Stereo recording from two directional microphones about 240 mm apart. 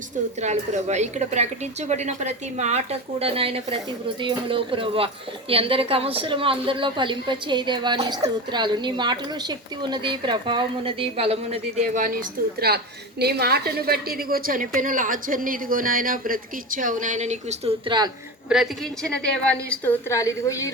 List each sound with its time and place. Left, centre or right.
0.4 s a woman's voice: right
18.4 s a woman's voice: centre